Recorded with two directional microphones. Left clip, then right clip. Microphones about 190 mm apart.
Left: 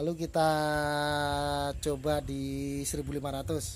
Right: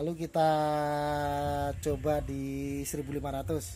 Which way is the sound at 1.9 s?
Centre (ahead or behind).